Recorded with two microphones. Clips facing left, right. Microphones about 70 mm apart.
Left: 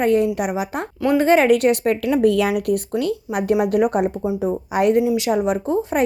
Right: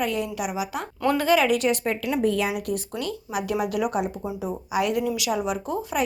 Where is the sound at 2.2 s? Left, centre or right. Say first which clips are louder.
Left 6 dB; left.